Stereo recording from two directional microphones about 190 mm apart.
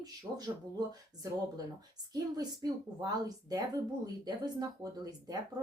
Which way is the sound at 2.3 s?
20° right (ahead or behind).